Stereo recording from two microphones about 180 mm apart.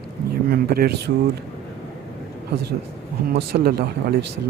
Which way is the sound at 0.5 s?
60° right (ahead or behind).